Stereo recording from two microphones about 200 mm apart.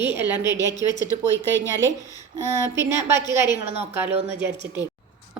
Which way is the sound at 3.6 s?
30° right (ahead or behind).